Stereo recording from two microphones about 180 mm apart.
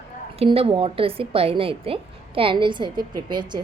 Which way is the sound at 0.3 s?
30° right (ahead or behind).